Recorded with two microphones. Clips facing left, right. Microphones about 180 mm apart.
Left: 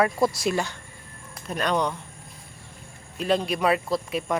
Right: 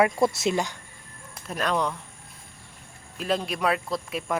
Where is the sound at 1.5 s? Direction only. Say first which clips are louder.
Left 1 dB; centre (ahead or behind).